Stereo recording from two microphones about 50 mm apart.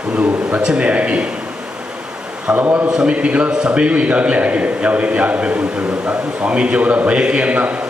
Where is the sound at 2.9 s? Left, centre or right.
Centre.